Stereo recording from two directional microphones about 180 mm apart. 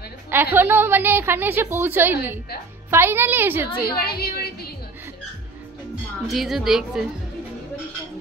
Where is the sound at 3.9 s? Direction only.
60° left (ahead or behind).